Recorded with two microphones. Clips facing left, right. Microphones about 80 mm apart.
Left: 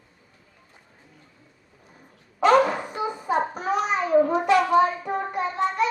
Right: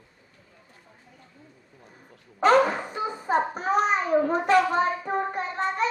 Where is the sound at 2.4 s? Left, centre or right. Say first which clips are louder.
Left 1 dB; right.